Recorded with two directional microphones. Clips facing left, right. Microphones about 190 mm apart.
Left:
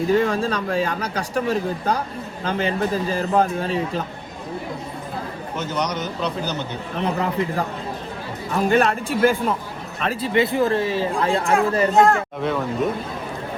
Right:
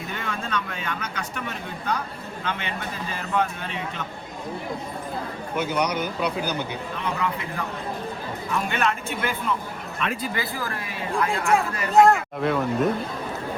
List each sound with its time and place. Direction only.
0.1 s speech: 35° left (ahead or behind)
5.5 s speech: 10° right (ahead or behind)
7.0 s speech: 35° left (ahead or behind)
10.3 s speech: 20° left (ahead or behind)
12.0 s speech: centre (ahead or behind)